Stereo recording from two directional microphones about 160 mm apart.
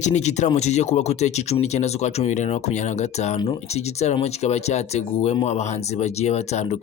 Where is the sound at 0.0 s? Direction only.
45° left (ahead or behind).